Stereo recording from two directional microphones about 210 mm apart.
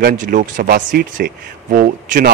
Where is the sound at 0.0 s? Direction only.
40° right (ahead or behind).